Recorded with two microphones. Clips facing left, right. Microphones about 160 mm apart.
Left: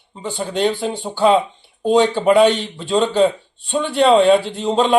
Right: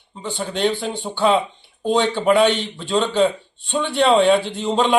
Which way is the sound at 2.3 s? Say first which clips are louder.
Left 3 dB; 40° left (ahead or behind).